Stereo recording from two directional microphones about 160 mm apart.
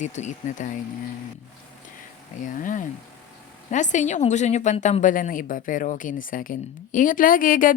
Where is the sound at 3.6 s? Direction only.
50° left (ahead or behind).